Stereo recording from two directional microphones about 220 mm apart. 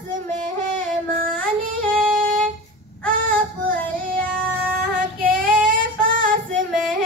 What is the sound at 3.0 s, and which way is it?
Child singing, 40° right (ahead or behind).